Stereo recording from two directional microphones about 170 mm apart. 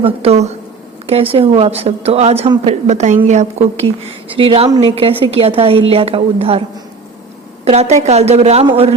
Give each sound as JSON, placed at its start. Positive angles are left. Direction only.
{"t": 0.0, "sound": "a woman's voice", "side_deg": -35}
{"t": 7.6, "sound": "a woman's voice", "side_deg": -40}